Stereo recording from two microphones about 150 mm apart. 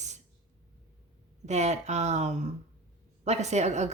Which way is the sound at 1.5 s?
50° right (ahead or behind).